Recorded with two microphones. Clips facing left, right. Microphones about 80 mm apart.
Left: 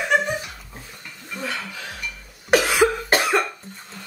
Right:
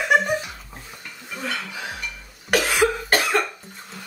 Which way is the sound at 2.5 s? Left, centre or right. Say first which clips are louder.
Left 2 dB; centre.